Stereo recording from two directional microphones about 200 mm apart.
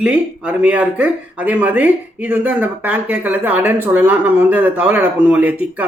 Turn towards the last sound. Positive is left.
turn(degrees=-10)  # may be behind; listen again after turning